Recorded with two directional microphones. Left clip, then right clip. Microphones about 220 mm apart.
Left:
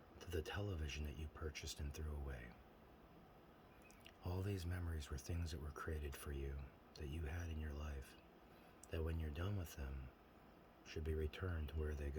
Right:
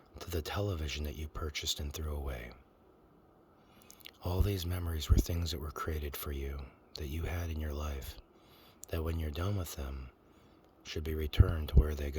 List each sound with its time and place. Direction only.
0.2 s speech: 50° right (ahead or behind)
3.8 s speech: 50° right (ahead or behind)